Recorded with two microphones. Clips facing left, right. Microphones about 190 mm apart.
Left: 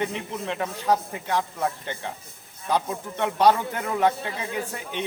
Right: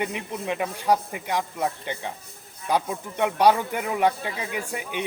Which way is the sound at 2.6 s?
10° right (ahead or behind).